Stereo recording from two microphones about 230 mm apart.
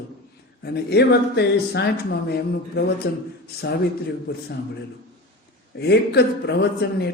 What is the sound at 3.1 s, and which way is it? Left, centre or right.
Speech, left.